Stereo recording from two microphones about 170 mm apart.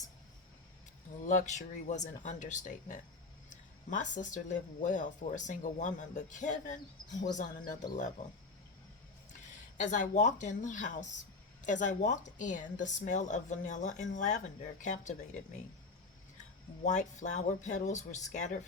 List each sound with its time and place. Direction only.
1.3 s speech: 45° left (ahead or behind)
9.7 s speech: 45° left (ahead or behind)
16.8 s speech: 45° left (ahead or behind)